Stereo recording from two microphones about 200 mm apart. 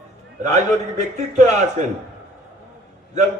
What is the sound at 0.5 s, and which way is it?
A man's voice, 35° right (ahead or behind).